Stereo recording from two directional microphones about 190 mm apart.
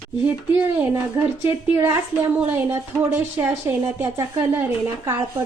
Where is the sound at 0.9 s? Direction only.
10° right (ahead or behind).